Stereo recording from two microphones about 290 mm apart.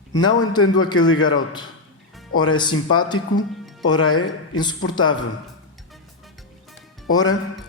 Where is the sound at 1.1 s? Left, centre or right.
Left.